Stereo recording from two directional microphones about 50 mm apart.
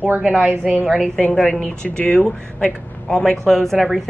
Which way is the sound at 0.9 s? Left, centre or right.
Centre.